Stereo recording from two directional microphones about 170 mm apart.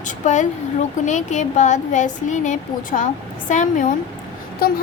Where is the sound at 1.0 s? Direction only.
45° left (ahead or behind).